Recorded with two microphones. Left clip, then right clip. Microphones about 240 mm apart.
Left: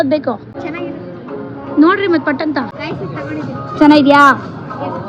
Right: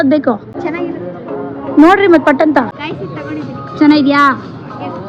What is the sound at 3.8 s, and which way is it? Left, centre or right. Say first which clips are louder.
Speech: left 2 dB; centre.